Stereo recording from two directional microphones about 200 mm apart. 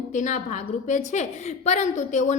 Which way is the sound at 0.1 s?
40° left (ahead or behind).